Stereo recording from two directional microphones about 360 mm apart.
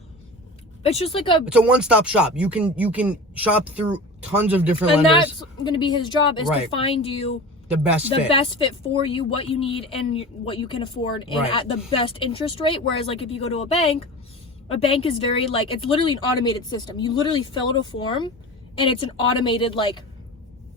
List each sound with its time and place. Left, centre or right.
0.8 s speech: centre
1.5 s speech: centre
4.9 s speech: centre